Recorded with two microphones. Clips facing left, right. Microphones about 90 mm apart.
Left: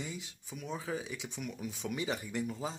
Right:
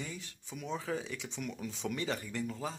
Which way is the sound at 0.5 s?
5° left (ahead or behind).